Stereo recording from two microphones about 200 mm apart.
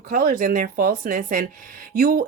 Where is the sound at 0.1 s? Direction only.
45° right (ahead or behind).